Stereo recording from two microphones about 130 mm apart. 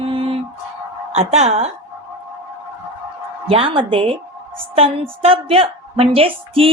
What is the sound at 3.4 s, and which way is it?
A woman's voice, 45° right (ahead or behind).